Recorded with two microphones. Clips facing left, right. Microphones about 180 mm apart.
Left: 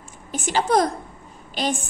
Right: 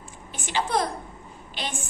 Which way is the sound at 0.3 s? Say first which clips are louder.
Left 6 dB; 40° left (ahead or behind).